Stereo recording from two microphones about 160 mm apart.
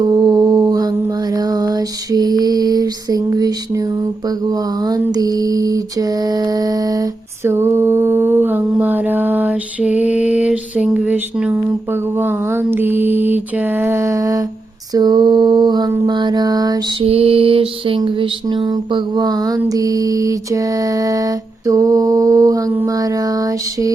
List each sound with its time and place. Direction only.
0.1 s mantra: 25° right (ahead or behind)
14.9 s a sound: 25° right (ahead or behind)
16.0 s mantra: 30° right (ahead or behind)
17.0 s mantra: 35° right (ahead or behind); by 23.9 s 20° right (ahead or behind)